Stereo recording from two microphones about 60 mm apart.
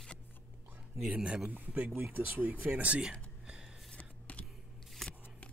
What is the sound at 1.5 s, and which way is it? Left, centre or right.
Speech, right.